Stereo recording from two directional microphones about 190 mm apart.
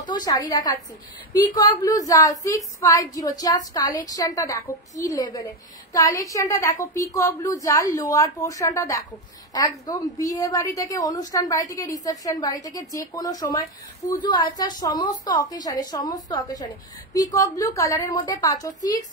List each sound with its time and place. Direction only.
0.1 s a woman's voice: 20° left (ahead or behind)